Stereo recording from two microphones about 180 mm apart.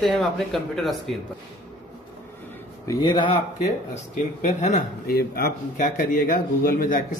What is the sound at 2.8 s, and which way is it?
Speech, 25° left (ahead or behind).